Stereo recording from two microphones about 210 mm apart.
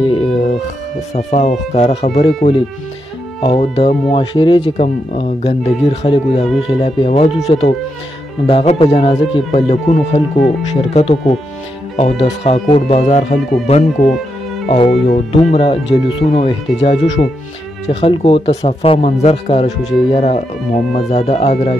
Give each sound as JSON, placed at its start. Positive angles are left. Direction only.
{"t": 0.1, "sound": "music", "side_deg": 25}
{"t": 1.1, "sound": "speech", "side_deg": 35}